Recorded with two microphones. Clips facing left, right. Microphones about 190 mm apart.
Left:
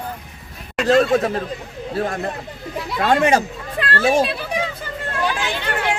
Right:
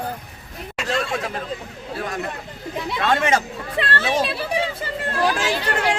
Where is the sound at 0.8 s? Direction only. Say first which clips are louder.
Left 10 dB; 40° left (ahead or behind).